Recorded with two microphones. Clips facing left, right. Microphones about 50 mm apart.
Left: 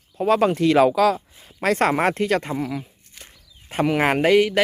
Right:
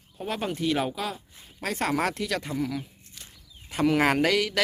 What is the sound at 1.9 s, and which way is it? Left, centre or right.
Speech, left.